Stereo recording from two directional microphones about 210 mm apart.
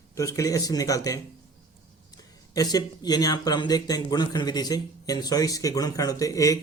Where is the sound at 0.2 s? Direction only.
15° left (ahead or behind).